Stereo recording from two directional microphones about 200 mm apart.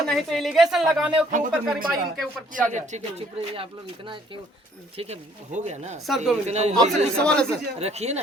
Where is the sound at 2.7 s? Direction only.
35° right (ahead or behind).